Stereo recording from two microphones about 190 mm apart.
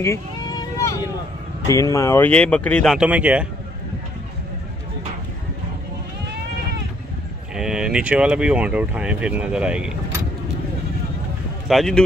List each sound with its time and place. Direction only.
0.0 s sheep: 20° left (ahead or behind)
1.7 s speech: 15° left (ahead or behind); by 3.4 s 5° right (ahead or behind)
7.5 s speech: 5° right (ahead or behind)
11.6 s speech: centre (ahead or behind)